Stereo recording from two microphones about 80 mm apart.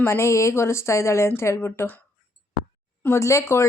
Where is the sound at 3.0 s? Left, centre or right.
Left.